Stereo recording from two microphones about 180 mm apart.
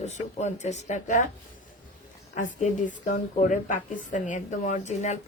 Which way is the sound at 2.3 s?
45° left (ahead or behind).